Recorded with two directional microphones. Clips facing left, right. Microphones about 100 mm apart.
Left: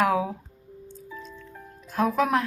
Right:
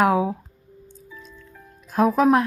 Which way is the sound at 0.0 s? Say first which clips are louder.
Right 4 dB; 40° right (ahead or behind).